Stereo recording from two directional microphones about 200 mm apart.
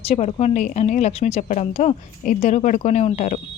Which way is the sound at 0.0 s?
30° left (ahead or behind).